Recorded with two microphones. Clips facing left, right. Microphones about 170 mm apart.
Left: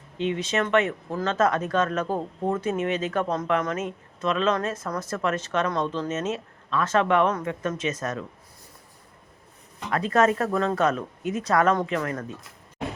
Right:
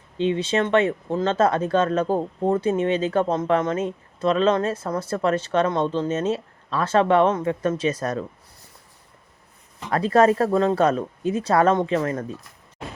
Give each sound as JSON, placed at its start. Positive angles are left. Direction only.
{"t": 0.2, "sound": "speech", "side_deg": -30}
{"t": 9.9, "sound": "speech", "side_deg": -35}